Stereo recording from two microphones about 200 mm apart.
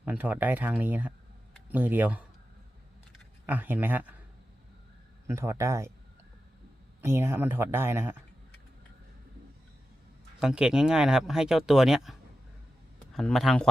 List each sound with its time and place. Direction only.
0.0 s speech: 10° right (ahead or behind)
3.4 s speech: 10° right (ahead or behind)
5.3 s speech: 15° right (ahead or behind)
7.0 s speech: 15° right (ahead or behind)
10.4 s speech: 5° right (ahead or behind)
13.1 s speech: centre (ahead or behind)